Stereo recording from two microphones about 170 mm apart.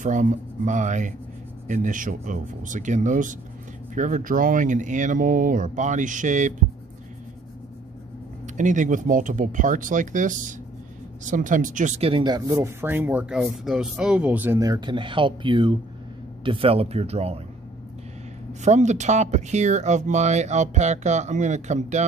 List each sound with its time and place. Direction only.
0.0 s speech: 50° right (ahead or behind)
8.5 s speech: 45° right (ahead or behind)
18.5 s speech: 45° right (ahead or behind)